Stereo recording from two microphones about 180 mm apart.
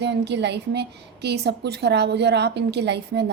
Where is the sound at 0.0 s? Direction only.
70° right (ahead or behind).